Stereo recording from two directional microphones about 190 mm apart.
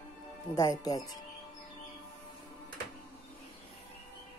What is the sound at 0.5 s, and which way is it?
Speech, 20° left (ahead or behind).